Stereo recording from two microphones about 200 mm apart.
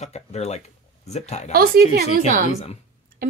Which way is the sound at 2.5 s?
35° left (ahead or behind).